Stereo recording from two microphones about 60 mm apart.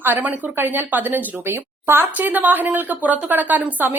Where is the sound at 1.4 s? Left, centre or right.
Right.